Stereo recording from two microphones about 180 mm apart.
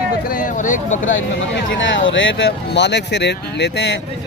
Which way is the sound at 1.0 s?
90° left.